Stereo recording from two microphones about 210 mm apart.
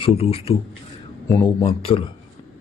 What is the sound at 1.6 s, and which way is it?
Speech, 25° left (ahead or behind).